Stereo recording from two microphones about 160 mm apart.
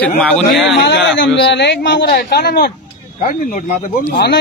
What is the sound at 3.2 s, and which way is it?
Speech, 55° left (ahead or behind).